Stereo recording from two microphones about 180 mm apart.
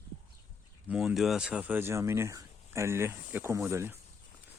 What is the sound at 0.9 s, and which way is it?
Speech, centre (ahead or behind).